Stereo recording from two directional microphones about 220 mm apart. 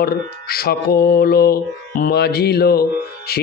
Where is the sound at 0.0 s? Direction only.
45° left (ahead or behind).